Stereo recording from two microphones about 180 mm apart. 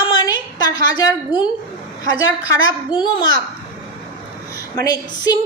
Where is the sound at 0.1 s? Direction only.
20° left (ahead or behind).